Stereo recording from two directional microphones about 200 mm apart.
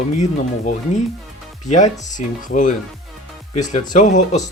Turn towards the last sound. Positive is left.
turn(degrees=35)  # may be behind; listen again after turning